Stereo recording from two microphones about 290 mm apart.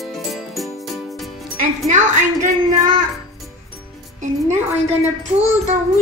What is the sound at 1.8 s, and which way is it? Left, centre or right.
Speech, right.